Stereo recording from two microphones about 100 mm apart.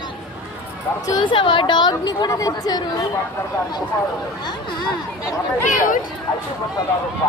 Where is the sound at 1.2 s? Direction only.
55° left (ahead or behind); by 2.8 s 40° left (ahead or behind).